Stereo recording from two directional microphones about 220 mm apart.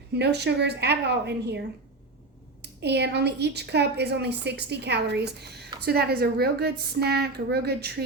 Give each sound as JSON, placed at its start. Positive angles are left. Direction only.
{"t": 0.1, "sound": "a woman's voice", "side_deg": -50}